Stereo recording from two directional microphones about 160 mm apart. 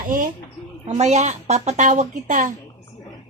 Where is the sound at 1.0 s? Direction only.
45° right (ahead or behind).